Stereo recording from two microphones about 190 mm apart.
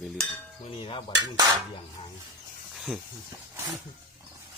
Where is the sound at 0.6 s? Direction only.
30° left (ahead or behind).